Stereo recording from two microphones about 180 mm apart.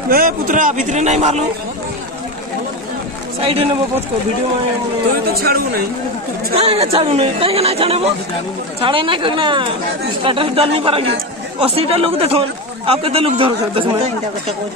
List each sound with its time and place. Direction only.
0.1 s a man's voice: 50° right (ahead or behind)
3.3 s a man's voice: 35° right (ahead or behind)
5.3 s speech: 60° right (ahead or behind)
6.5 s a man's voice: 35° right (ahead or behind)